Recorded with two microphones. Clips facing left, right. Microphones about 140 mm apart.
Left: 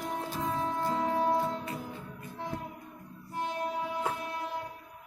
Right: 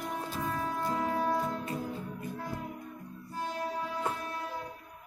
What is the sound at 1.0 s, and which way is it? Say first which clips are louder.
Music: left 3 dB; 20° left (ahead or behind).